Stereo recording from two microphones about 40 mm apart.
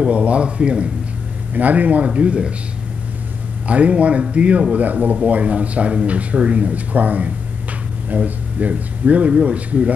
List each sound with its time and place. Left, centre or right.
0.0 s a man's voice: right
1.5 s speech: right
3.6 s speech: right